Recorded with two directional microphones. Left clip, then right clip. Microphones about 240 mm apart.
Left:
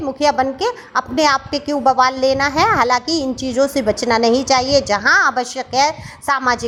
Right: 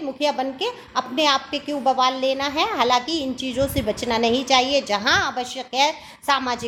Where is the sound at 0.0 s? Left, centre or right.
Left.